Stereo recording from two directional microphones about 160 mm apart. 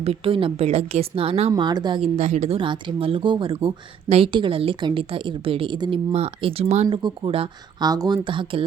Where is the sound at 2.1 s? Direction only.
45° right (ahead or behind).